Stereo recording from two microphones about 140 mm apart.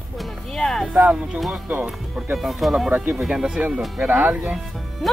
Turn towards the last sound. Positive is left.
turn(degrees=-5)  # may be behind; listen again after turning